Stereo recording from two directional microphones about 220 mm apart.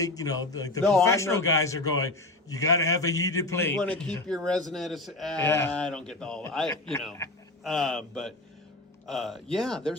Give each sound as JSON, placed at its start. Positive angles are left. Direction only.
{"t": 0.0, "sound": "a man's voice", "side_deg": 15}